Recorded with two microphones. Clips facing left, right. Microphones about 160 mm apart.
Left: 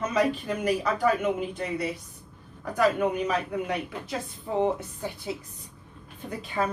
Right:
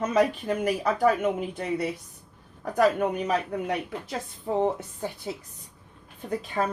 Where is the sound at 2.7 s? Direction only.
50° right (ahead or behind).